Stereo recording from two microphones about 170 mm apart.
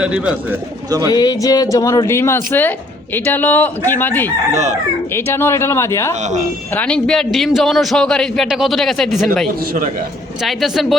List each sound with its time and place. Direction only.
0.0 s a man's voice: 5° right (ahead or behind)
0.9 s speech: 20° right (ahead or behind)
1.1 s speech: 25° left (ahead or behind)
4.5 s speech: 45° right (ahead or behind)
5.1 s a man's voice: 15° left (ahead or behind)